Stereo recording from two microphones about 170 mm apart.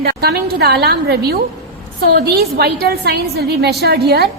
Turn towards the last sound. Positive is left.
turn(degrees=-75)  # may be behind; listen again after turning